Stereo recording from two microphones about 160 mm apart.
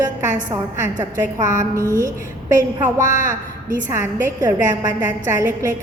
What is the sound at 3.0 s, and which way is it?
Speech, 50° left (ahead or behind).